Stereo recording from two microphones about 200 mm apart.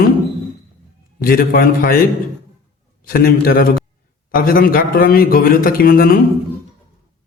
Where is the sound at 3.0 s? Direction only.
45° left (ahead or behind).